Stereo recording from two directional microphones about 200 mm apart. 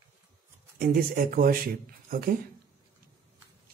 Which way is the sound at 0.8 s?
45° right (ahead or behind).